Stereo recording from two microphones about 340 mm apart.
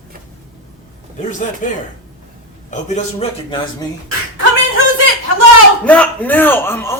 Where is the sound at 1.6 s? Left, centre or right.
Left.